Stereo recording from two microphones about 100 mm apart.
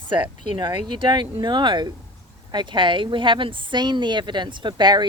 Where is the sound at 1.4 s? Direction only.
50° right (ahead or behind).